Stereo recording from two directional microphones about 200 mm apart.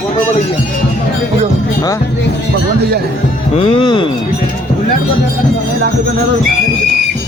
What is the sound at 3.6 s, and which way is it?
Music, 25° left (ahead or behind).